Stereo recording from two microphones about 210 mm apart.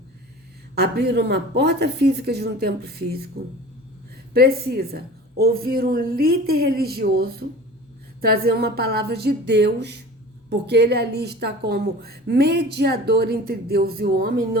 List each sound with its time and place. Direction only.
0.8 s a woman's voice: 50° right (ahead or behind)
4.4 s a woman's voice: 45° right (ahead or behind)